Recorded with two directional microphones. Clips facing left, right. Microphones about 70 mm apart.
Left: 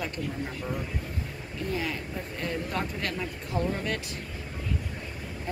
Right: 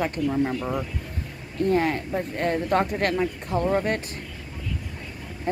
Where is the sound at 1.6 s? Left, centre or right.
Right.